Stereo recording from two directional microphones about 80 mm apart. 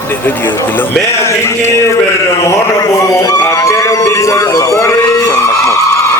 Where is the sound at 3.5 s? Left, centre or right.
Left.